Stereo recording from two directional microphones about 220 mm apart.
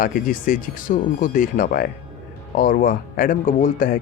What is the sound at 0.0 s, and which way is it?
Speech, 40° left (ahead or behind).